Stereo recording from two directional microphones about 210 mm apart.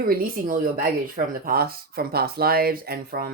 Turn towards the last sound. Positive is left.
turn(degrees=-45)  # may be behind; listen again after turning